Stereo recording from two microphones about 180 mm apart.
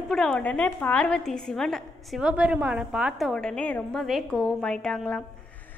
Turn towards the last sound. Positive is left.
turn(degrees=5)  # may be behind; listen again after turning